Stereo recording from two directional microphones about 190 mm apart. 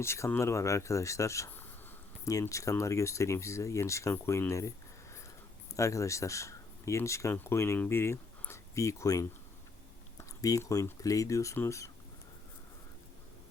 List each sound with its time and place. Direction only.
0.0 s speech: 15° left (ahead or behind)
5.7 s speech: 15° left (ahead or behind)